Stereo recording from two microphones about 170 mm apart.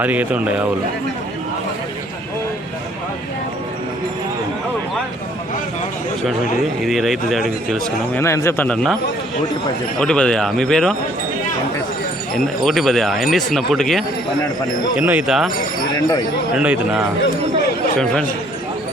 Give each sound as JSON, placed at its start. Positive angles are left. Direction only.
{"t": 0.0, "sound": "speech", "side_deg": -10}
{"t": 6.8, "sound": "speech", "side_deg": 0}
{"t": 8.2, "sound": "speech", "side_deg": 15}
{"t": 10.0, "sound": "speech", "side_deg": 5}
{"t": 12.3, "sound": "speech", "side_deg": 0}
{"t": 16.0, "sound": "speech", "side_deg": 20}
{"t": 16.6, "sound": "speech", "side_deg": -10}
{"t": 18.0, "sound": "speech", "side_deg": 5}